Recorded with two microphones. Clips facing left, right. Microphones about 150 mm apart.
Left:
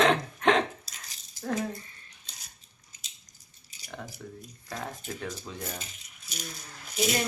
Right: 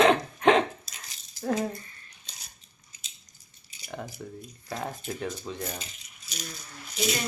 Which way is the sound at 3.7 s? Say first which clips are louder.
Right 2 dB; 40° left (ahead or behind).